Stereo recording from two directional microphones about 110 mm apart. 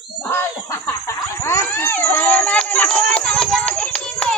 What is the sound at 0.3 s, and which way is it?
Screaming, 20° left (ahead or behind).